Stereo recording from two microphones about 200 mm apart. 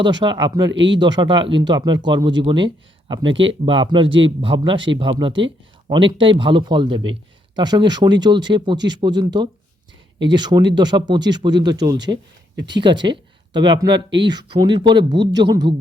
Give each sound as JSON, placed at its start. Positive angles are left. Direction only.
{"t": 0.0, "sound": "a man's voice", "side_deg": -25}